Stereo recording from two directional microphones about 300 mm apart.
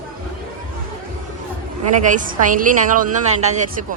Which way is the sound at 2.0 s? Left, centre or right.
Right.